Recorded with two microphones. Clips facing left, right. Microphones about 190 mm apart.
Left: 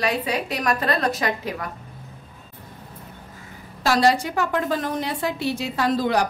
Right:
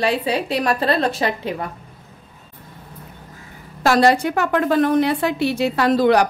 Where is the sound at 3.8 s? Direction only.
55° right (ahead or behind).